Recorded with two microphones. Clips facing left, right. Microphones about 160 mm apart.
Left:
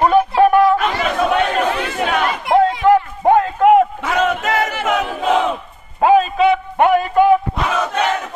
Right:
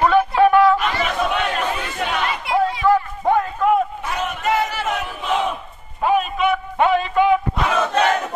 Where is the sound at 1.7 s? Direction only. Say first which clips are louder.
Left 5 dB; 55° left (ahead or behind); by 4.7 s 90° left.